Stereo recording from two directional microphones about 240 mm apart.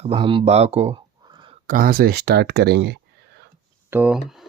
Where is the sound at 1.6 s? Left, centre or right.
Right.